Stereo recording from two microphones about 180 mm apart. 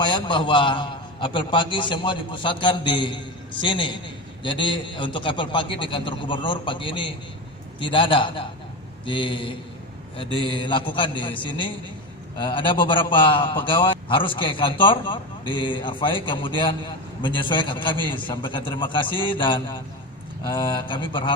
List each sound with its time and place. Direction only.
0.0 s a man's voice: 25° left (ahead or behind)
10.6 s a man's voice: 25° left (ahead or behind)